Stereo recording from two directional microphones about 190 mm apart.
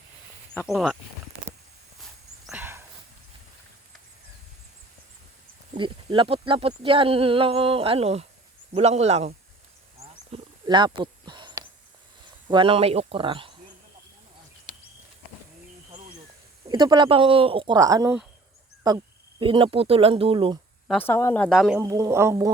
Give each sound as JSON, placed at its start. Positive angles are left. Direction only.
{"t": 0.7, "sound": "speech", "side_deg": 0}
{"t": 2.5, "sound": "a sound", "side_deg": -10}
{"t": 5.7, "sound": "speech", "side_deg": -25}
{"t": 10.0, "sound": "wild animals", "side_deg": -25}
{"t": 12.5, "sound": "speech", "side_deg": -25}
{"t": 16.6, "sound": "speech", "side_deg": -20}
{"t": 20.8, "sound": "speech", "side_deg": 5}
{"t": 21.8, "sound": "speech", "side_deg": -15}